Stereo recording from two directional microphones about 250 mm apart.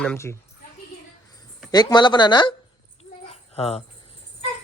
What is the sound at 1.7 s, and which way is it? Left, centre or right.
Speech, centre.